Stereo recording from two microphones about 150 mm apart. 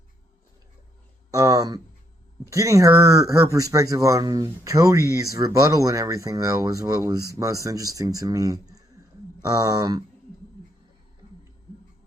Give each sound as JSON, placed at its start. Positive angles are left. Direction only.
{"t": 1.3, "sound": "speech", "side_deg": -20}